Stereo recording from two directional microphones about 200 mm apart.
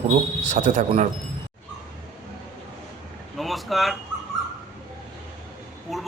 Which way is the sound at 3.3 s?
Centre (ahead or behind).